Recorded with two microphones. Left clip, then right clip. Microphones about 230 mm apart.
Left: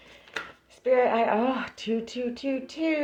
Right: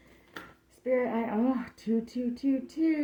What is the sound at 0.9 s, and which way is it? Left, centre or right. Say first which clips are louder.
Speech: left 7 dB; centre.